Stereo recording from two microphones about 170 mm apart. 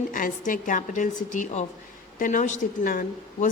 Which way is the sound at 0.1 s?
55° left (ahead or behind).